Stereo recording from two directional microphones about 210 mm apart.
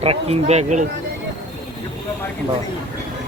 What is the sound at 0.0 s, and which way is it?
Speech, 30° right (ahead or behind).